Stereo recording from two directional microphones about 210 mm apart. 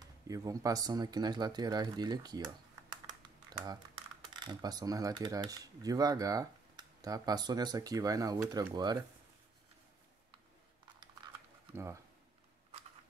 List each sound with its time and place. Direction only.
0.3 s speech: 15° right (ahead or behind)
11.7 s speech: 15° right (ahead or behind)